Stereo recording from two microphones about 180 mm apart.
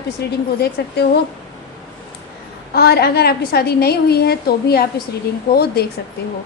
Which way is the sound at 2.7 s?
60° left (ahead or behind).